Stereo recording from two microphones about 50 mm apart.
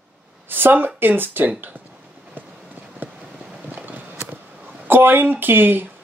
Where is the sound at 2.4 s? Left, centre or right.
Right.